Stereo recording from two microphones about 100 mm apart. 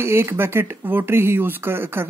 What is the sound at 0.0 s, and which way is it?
Speech, 25° right (ahead or behind).